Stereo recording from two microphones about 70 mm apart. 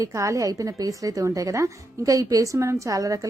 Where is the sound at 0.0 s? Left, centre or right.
Right.